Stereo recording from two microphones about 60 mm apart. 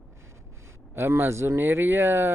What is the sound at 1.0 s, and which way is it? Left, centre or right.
Speech, right.